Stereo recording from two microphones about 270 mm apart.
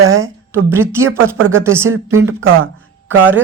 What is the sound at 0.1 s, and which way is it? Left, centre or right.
A woman's voice, centre.